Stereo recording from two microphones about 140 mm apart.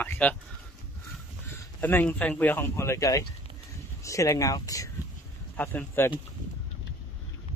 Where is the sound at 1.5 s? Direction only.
15° left (ahead or behind).